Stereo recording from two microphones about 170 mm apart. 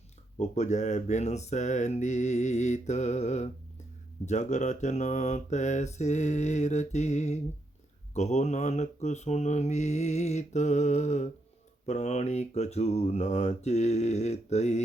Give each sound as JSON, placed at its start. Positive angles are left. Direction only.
{"t": 0.3, "sound": "mantra", "side_deg": 40}
{"t": 11.9, "sound": "speech", "side_deg": 40}